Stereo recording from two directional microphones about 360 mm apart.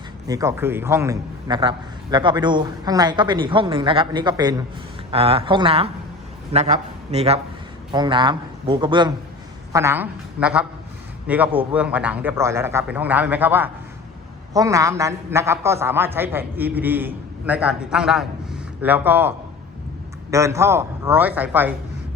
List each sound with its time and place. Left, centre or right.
0.3 s a man's voice: centre
20.3 s a woman's voice: centre